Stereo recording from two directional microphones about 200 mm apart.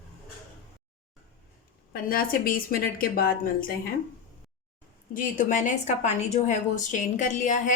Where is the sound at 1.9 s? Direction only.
45° left (ahead or behind).